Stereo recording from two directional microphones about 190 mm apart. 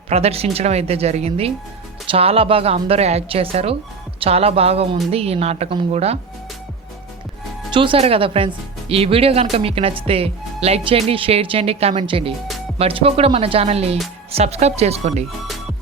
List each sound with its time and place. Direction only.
0.1 s speech: 35° right (ahead or behind)
7.7 s speech: 25° right (ahead or behind)